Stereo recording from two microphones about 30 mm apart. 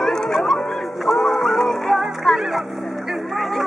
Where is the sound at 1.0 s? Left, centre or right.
Centre.